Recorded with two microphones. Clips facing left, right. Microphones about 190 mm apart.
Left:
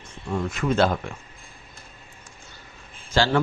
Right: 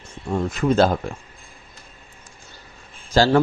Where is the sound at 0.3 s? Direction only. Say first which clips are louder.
Right 4 dB; 35° right (ahead or behind).